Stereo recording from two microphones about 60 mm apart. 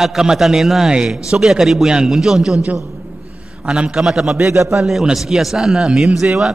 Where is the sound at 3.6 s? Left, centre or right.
Centre.